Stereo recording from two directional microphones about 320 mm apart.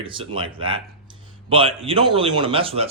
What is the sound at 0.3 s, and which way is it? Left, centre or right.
A man's voice, centre.